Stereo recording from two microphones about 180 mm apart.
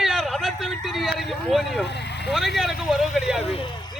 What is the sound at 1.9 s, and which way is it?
Speech, 70° left (ahead or behind).